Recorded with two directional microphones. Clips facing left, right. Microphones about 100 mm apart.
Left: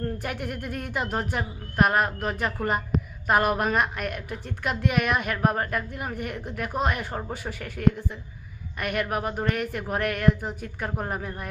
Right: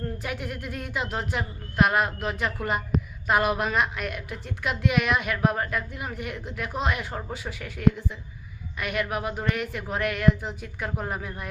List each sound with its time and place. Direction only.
0.2 s a woman's voice: 50° left (ahead or behind)